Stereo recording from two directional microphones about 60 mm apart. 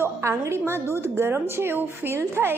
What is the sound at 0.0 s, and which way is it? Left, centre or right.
A woman's voice, right.